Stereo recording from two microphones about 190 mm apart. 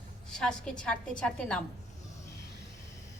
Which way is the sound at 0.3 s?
5° left (ahead or behind).